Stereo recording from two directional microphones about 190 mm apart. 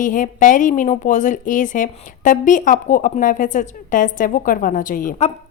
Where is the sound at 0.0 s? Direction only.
40° left (ahead or behind).